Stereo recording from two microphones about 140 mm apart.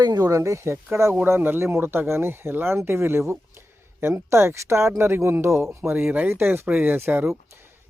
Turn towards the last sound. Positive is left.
turn(degrees=-15)  # may be behind; listen again after turning